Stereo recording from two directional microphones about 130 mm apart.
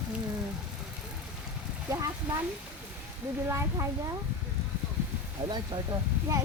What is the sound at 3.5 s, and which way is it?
Speech, 20° right (ahead or behind).